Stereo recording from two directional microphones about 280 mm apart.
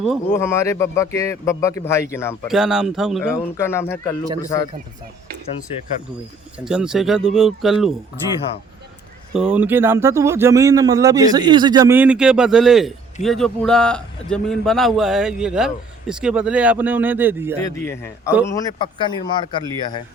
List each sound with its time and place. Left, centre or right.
0.0 s speech: centre
2.5 s a man's voice: centre
6.7 s a man's voice: centre
9.3 s a man's voice: centre
17.7 s speech: centre